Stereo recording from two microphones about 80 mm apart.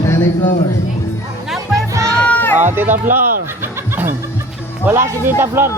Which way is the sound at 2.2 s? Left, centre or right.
Left.